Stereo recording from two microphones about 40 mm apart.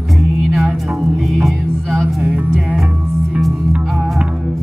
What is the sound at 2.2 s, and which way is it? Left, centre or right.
Music, right.